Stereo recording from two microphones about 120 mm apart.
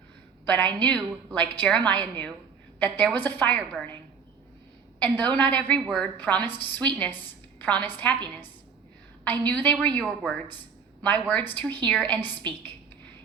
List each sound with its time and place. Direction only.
0.4 s a woman's voice: 15° left (ahead or behind)
4.9 s a woman's voice: 15° left (ahead or behind)
9.5 s a woman's voice: 15° left (ahead or behind)